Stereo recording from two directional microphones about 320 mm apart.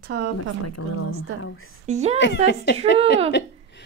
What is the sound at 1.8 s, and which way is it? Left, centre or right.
Speech, right.